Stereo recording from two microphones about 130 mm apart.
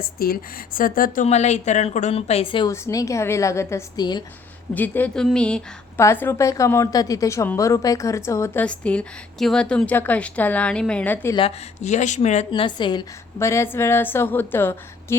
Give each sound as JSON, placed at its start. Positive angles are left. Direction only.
{"t": 0.7, "sound": "a woman's voice", "side_deg": 90}
{"t": 2.6, "sound": "a woman's voice", "side_deg": 25}
{"t": 6.0, "sound": "a woman's voice", "side_deg": 20}
{"t": 8.6, "sound": "a woman's voice", "side_deg": 10}
{"t": 11.8, "sound": "a woman's voice", "side_deg": 65}
{"t": 12.5, "sound": "a woman's voice", "side_deg": 35}
{"t": 13.4, "sound": "a woman's voice", "side_deg": 20}